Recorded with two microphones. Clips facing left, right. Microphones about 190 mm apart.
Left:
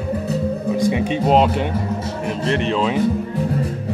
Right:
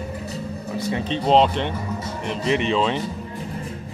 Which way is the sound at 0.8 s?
15° left (ahead or behind).